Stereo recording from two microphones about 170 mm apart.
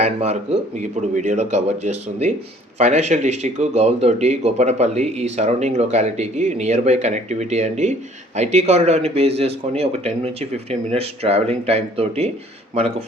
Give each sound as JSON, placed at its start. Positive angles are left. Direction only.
{"t": 0.0, "sound": "speech", "side_deg": -40}